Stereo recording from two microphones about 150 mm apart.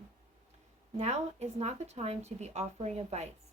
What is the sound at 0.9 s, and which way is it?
Speech, 45° right (ahead or behind).